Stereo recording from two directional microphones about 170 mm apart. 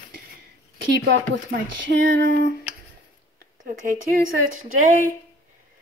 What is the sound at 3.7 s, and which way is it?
Speech, 55° right (ahead or behind).